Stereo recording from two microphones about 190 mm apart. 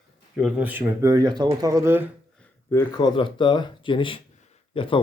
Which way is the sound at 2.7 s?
25° left (ahead or behind).